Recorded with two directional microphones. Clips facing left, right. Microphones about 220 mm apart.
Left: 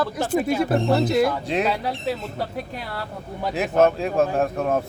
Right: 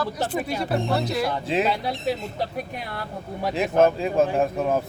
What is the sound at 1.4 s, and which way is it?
Speech, centre (ahead or behind).